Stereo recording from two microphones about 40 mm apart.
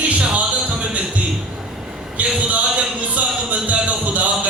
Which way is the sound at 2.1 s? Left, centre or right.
Right.